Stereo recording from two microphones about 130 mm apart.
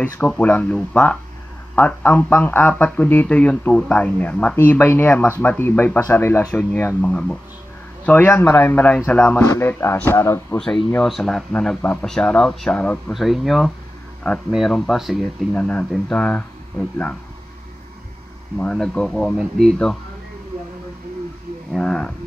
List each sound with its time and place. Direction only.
0.3 s speech: 10° left (ahead or behind)
1.8 s speech: 10° left (ahead or behind)
7.0 s speech: 5° left (ahead or behind); by 10.6 s 20° left (ahead or behind)
10.6 s speech: 5° left (ahead or behind)
13.1 s speech: centre (ahead or behind)
15.5 s speech: 10° left (ahead or behind)
18.6 s speech: 5° left (ahead or behind)
21.7 s speech: 5° left (ahead or behind)